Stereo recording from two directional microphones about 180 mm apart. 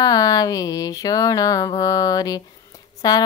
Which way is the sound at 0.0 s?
20° left (ahead or behind).